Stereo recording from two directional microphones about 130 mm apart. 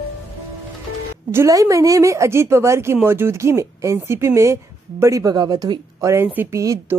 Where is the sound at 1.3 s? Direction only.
25° right (ahead or behind).